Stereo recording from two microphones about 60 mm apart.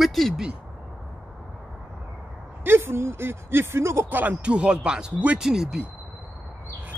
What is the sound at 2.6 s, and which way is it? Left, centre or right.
Speech, right.